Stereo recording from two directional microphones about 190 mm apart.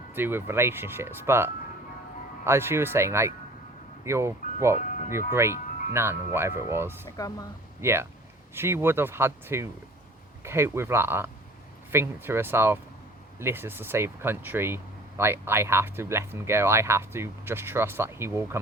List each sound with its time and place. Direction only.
0.1 s speech: 10° right (ahead or behind)
2.5 s speech: 15° right (ahead or behind)
7.2 s speech: 20° left (ahead or behind)
7.8 s speech: 15° right (ahead or behind)